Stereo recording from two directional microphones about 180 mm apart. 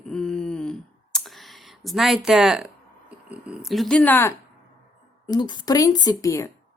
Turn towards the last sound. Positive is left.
turn(degrees=20)  # may be behind; listen again after turning